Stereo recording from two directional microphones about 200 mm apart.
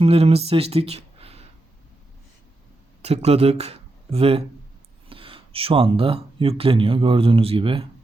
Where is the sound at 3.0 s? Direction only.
30° right (ahead or behind).